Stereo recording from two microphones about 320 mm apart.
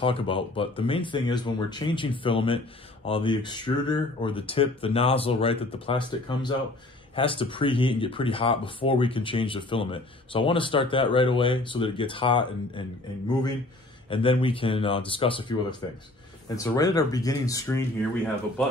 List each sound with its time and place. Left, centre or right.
0.0 s speech: centre
14.1 s speech: centre